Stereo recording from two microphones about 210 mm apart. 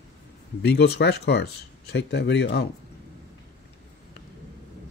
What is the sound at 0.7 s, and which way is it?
Speech, 55° left (ahead or behind).